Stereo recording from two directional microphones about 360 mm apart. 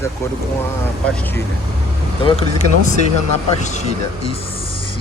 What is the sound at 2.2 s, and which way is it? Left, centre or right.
Speech, centre.